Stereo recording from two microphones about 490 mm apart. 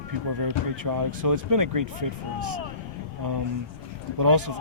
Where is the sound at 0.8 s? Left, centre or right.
Right.